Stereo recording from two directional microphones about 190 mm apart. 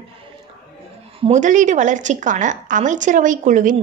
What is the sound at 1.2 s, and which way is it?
A woman's voice, 40° right (ahead or behind).